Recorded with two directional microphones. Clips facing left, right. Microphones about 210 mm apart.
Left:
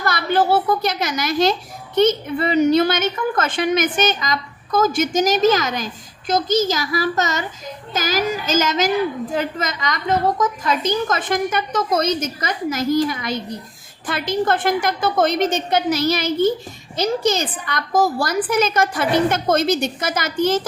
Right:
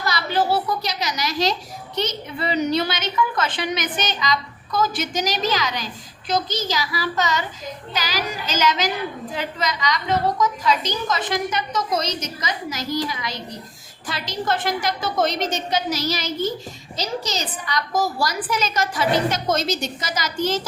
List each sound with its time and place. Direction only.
0.0 s a child's voice: 55° left (ahead or behind)